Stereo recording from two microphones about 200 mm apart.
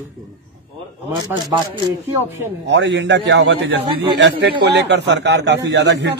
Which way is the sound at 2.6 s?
60° right (ahead or behind).